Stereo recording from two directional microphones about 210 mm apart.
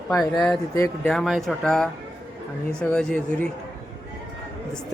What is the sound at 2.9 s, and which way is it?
Speech, 5° left (ahead or behind).